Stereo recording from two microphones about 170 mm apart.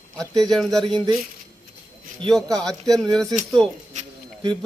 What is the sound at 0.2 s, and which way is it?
Speech, centre (ahead or behind).